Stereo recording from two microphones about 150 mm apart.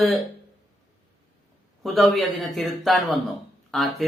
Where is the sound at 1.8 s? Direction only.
Centre (ahead or behind).